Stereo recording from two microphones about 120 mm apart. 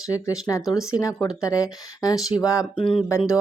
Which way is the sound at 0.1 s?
30° left (ahead or behind).